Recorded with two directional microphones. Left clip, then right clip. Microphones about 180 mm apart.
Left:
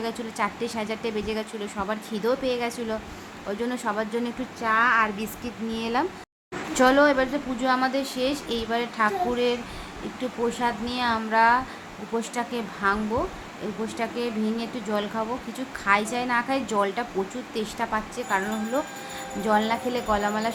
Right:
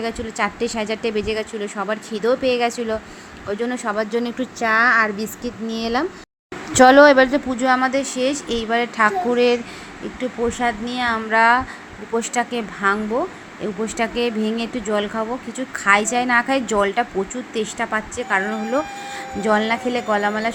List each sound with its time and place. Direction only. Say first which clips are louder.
0.0 s speech: right 5 dB; 20° right (ahead or behind)
6.7 s speech: right 9 dB; 35° right (ahead or behind)
10.6 s speech: right 5 dB; 15° right (ahead or behind)